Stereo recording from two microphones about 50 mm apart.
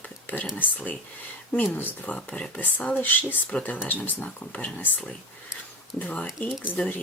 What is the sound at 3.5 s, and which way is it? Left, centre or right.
Speech, left.